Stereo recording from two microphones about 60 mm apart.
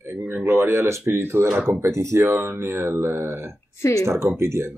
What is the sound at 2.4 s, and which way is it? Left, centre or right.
Speech, right.